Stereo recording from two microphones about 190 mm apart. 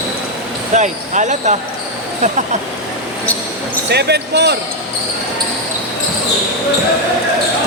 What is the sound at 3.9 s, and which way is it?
Speech, 60° right (ahead or behind).